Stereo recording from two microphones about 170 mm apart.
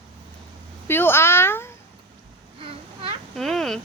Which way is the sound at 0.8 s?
15° left (ahead or behind).